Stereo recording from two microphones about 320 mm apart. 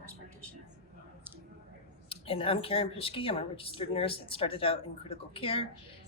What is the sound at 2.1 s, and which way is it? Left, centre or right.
Speech, centre.